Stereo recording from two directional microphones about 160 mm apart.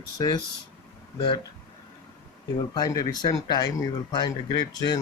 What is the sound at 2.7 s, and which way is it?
Speech, 25° left (ahead or behind).